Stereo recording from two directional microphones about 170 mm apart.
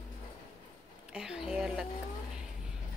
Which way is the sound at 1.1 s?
5° right (ahead or behind).